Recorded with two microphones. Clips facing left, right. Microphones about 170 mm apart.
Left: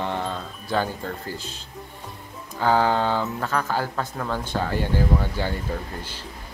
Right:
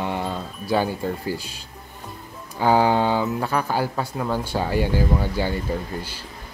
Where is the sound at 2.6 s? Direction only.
15° right (ahead or behind).